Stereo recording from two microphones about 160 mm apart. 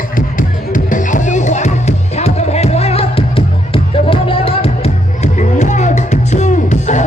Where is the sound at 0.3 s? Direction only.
55° left (ahead or behind).